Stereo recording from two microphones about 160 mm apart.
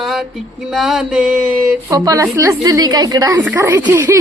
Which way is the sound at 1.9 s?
20° right (ahead or behind).